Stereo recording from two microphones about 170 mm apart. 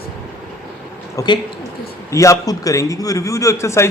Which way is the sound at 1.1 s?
25° left (ahead or behind).